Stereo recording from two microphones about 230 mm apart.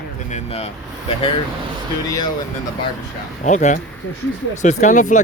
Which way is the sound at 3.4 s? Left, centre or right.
Left.